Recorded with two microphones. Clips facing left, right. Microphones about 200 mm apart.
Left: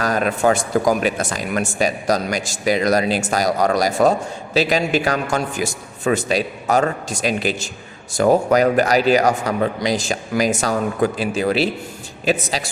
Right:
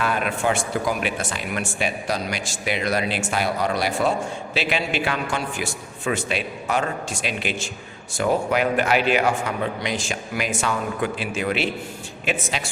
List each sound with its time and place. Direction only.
0.0 s a man's voice: 40° left (ahead or behind)